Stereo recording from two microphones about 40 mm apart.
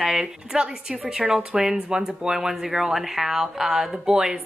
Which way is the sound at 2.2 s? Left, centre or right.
Centre.